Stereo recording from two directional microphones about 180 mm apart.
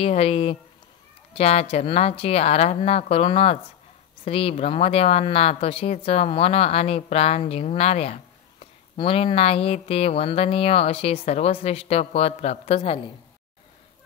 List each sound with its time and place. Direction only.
0.0 s speech: 35° left (ahead or behind)